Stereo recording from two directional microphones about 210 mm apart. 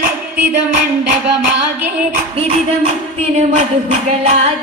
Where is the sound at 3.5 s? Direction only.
30° right (ahead or behind).